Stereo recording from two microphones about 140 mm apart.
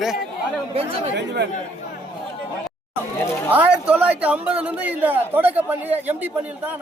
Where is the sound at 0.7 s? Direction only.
45° right (ahead or behind).